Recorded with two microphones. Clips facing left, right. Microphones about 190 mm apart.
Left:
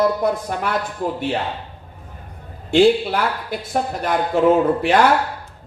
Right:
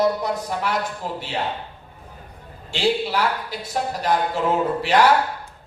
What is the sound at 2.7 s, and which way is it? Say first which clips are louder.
A man's voice: left 8 dB; 55° left (ahead or behind).